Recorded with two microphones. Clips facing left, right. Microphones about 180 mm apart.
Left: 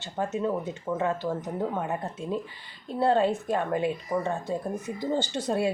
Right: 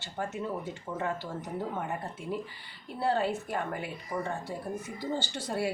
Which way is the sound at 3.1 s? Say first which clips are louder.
Left 6 dB; 20° left (ahead or behind).